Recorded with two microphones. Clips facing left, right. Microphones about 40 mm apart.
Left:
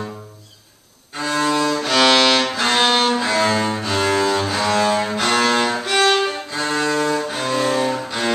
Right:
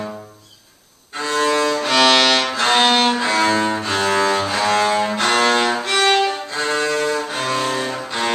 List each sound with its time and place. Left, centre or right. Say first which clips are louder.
1.1 s music: right 1 dB; centre
2.7 s music: right 2 dB; centre
3.2 s cello: right 1 dB; centre